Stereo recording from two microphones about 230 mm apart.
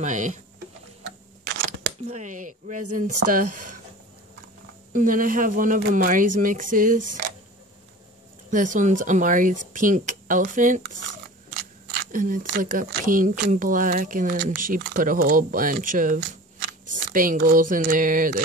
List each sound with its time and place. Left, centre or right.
0.0 s speech: right
2.0 s speech: right
3.4 s speech: right
4.9 s speech: right
8.5 s speech: right
11.9 s speech: right